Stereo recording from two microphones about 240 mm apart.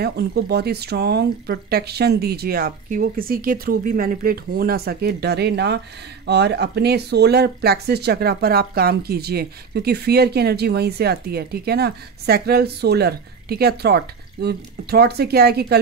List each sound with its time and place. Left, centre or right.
0.0 s speech: right